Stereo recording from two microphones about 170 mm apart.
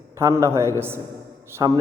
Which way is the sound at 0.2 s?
15° right (ahead or behind).